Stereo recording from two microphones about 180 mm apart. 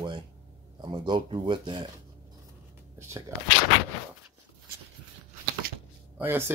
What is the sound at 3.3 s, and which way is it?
Speech, 15° right (ahead or behind).